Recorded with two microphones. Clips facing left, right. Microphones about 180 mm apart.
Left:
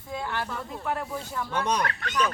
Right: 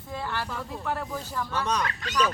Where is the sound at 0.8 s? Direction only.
10° left (ahead or behind).